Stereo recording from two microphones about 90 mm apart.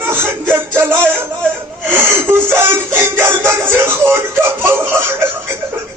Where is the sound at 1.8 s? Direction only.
25° right (ahead or behind).